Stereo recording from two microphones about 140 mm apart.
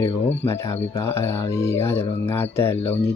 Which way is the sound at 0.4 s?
20° left (ahead or behind).